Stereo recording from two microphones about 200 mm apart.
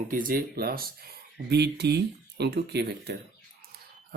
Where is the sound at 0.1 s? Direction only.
45° right (ahead or behind).